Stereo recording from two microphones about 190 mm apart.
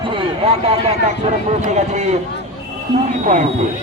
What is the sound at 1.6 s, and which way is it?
Speech, 40° right (ahead or behind).